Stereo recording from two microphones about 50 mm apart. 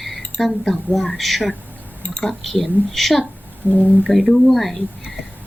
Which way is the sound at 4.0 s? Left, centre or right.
Centre.